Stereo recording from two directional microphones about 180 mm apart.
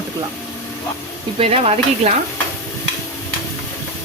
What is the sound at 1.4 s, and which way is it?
Stir, 35° right (ahead or behind).